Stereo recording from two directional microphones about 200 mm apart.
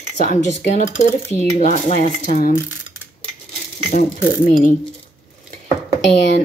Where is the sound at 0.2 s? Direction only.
40° left (ahead or behind).